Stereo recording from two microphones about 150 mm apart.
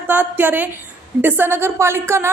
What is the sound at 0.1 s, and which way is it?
A woman's voice, 10° right (ahead or behind).